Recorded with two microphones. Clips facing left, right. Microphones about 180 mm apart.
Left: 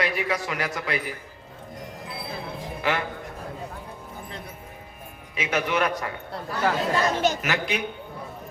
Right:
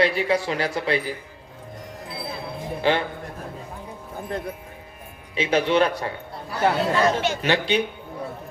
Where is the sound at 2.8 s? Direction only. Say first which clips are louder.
Right 5 dB; 30° right (ahead or behind).